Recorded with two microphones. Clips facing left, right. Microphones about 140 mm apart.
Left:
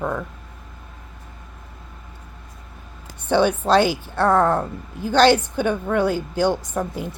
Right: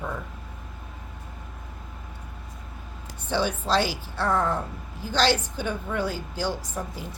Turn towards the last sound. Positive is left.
turn(degrees=60)  # may be behind; listen again after turning